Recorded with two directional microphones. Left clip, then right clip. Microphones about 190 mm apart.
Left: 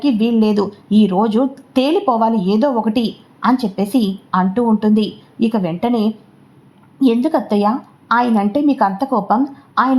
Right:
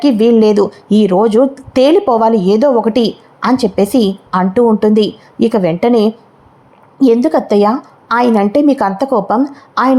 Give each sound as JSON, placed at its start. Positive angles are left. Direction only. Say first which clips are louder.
{"t": 0.0, "sound": "a woman's voice", "louder": "right 8 dB", "side_deg": -20}